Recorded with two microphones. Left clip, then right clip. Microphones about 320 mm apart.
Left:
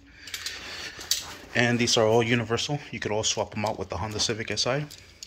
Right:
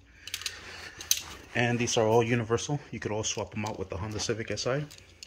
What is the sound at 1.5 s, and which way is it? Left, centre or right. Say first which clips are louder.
Speech: left 5 dB; centre.